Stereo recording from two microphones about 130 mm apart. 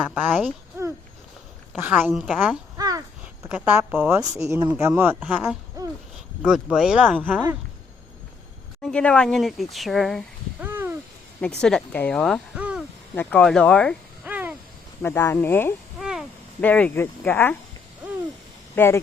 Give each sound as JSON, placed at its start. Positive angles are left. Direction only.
{"t": 0.0, "sound": "a woman's voice", "side_deg": -10}
{"t": 2.7, "sound": "a sound", "side_deg": -25}
{"t": 3.5, "sound": "a woman's voice", "side_deg": -15}
{"t": 8.8, "sound": "speech", "side_deg": 5}
{"t": 10.6, "sound": "a sound", "side_deg": -15}
{"t": 11.3, "sound": "speech", "side_deg": 10}
{"t": 12.5, "sound": "a sound", "side_deg": -10}
{"t": 13.1, "sound": "speech", "side_deg": 5}
{"t": 14.3, "sound": "owl", "side_deg": -15}
{"t": 15.0, "sound": "speech", "side_deg": 20}
{"t": 16.0, "sound": "a sound", "side_deg": -5}
{"t": 16.6, "sound": "speech", "side_deg": 10}
{"t": 18.8, "sound": "speech", "side_deg": 15}